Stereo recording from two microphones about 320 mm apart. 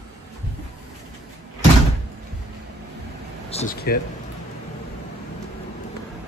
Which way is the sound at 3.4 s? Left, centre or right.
Left.